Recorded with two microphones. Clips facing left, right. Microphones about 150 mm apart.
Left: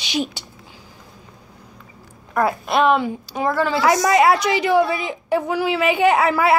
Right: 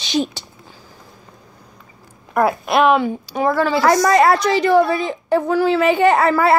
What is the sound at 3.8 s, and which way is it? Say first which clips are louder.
Speech: right 2 dB; 35° right (ahead or behind).